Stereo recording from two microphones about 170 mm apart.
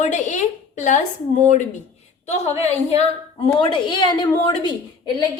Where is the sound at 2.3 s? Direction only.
40° left (ahead or behind).